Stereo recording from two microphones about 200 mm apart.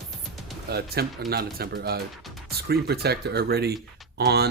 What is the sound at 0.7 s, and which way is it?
Speech, 50° right (ahead or behind).